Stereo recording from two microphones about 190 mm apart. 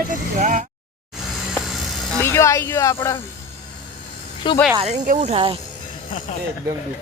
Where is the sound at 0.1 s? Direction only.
45° right (ahead or behind).